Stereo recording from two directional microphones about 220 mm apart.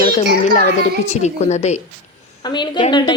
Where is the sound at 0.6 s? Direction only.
30° left (ahead or behind).